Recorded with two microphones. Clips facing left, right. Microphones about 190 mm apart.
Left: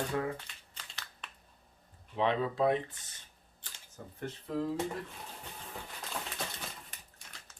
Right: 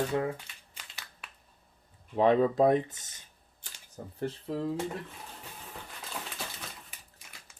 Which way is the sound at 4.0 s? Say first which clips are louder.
Right 5 dB; 35° right (ahead or behind).